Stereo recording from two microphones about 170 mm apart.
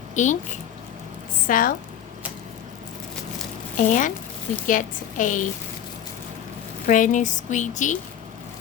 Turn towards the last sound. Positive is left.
turn(degrees=45)  # may be behind; listen again after turning